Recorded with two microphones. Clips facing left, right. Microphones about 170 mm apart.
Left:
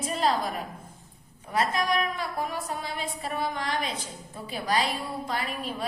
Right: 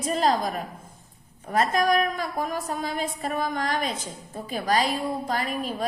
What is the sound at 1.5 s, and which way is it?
A woman's voice, 45° right (ahead or behind).